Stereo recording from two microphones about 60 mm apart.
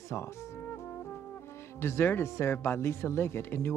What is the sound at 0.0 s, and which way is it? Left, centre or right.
Speech, left.